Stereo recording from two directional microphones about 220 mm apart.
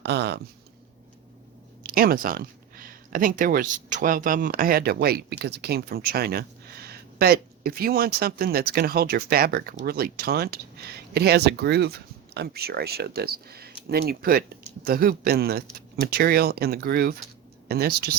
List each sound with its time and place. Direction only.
0.0 s speech: 50° right (ahead or behind)
1.8 s speech: 40° right (ahead or behind)